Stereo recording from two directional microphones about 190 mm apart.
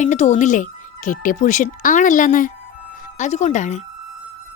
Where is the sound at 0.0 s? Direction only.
40° left (ahead or behind).